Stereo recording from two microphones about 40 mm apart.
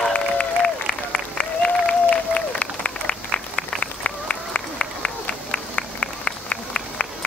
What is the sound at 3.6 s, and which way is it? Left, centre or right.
Run, left.